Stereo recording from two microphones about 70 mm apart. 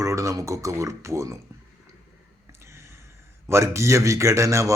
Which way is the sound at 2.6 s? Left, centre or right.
Right.